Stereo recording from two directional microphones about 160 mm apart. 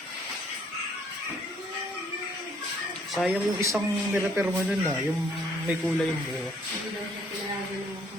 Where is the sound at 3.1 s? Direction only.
Centre (ahead or behind).